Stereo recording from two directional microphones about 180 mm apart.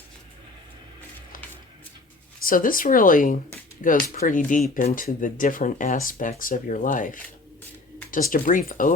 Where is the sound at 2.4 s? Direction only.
50° left (ahead or behind).